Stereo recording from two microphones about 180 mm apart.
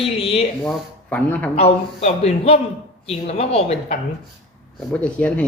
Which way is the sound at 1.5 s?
35° left (ahead or behind).